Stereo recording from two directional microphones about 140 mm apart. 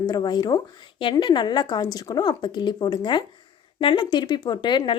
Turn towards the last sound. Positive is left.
turn(degrees=35)  # may be behind; listen again after turning